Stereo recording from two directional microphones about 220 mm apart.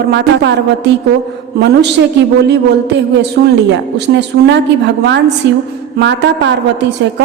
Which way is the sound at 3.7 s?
55° right (ahead or behind).